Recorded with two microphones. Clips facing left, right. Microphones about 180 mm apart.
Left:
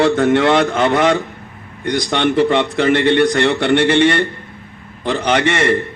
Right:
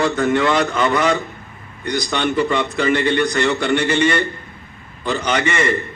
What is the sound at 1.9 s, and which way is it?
A man's voice, 75° left (ahead or behind).